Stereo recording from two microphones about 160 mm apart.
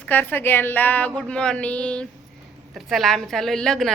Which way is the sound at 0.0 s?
10° left (ahead or behind).